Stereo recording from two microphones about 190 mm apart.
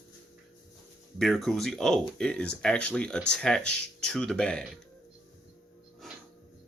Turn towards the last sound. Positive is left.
turn(degrees=0)  # may be behind; listen again after turning